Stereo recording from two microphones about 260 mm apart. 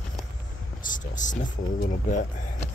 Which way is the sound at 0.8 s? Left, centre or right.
Left.